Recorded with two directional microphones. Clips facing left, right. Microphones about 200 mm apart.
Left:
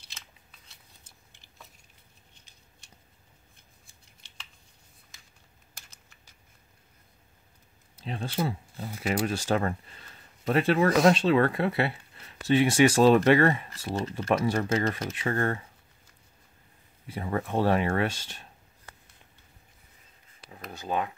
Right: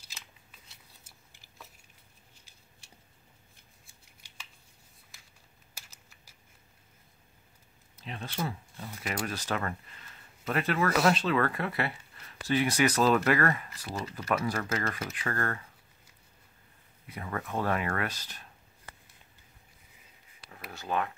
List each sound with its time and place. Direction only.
5.8 s typing: 5° right (ahead or behind)
7.9 s speech: 30° left (ahead or behind)
17.1 s speech: 30° left (ahead or behind)
20.7 s speech: 15° left (ahead or behind)